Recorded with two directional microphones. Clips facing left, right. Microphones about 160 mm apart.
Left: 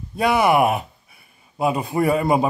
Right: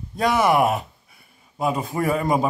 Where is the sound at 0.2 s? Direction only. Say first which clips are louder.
Left 2 dB; 10° left (ahead or behind).